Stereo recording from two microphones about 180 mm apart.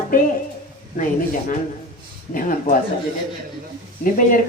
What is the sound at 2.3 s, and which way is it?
Speech, 50° left (ahead or behind).